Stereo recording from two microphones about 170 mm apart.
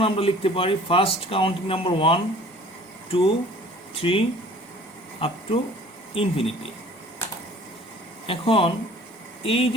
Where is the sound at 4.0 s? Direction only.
35° left (ahead or behind).